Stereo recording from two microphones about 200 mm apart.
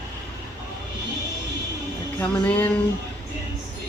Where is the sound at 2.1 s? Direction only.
10° left (ahead or behind).